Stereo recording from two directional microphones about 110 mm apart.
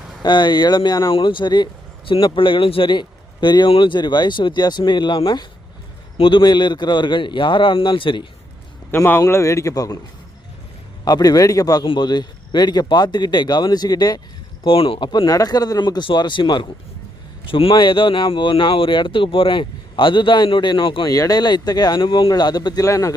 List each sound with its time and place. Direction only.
0.2 s speech: 40° left (ahead or behind)
1.1 s speech: 50° left (ahead or behind)
8.9 s a man's voice: 20° left (ahead or behind)
11.0 s speech: 35° left (ahead or behind)
14.6 s speech: 55° left (ahead or behind)
15.3 s speech: 35° left (ahead or behind)